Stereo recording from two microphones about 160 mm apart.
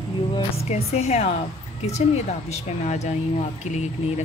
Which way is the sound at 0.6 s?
40° left (ahead or behind).